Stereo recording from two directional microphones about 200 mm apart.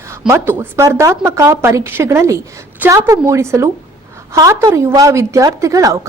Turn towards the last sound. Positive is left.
turn(degrees=-15)  # may be behind; listen again after turning